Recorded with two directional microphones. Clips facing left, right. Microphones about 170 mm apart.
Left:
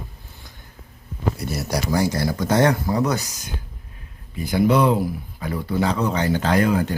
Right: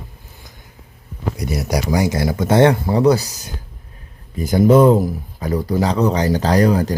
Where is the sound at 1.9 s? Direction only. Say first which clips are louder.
Right 2 dB; 20° right (ahead or behind).